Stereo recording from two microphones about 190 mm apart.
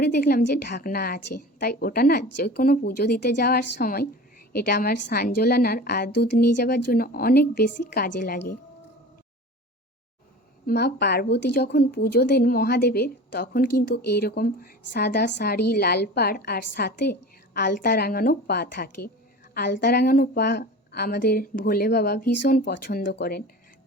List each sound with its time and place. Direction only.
0.0 s a woman's voice: 55° left (ahead or behind)
10.7 s a woman's voice: 60° left (ahead or behind)
22.8 s a woman's voice: 45° left (ahead or behind)
23.0 s a woman's voice: 60° left (ahead or behind)